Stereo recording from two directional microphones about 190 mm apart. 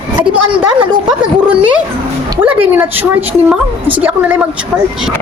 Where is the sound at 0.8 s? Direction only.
25° right (ahead or behind).